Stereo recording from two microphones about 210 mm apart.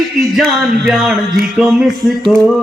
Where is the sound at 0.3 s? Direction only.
Centre (ahead or behind).